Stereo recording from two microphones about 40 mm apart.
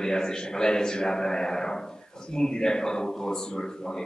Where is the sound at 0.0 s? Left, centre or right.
Centre.